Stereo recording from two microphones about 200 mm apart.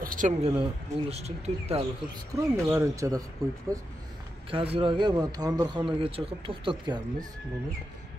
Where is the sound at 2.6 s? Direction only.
15° right (ahead or behind).